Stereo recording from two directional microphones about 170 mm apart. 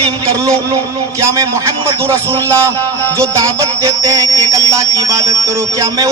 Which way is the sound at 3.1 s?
20° right (ahead or behind).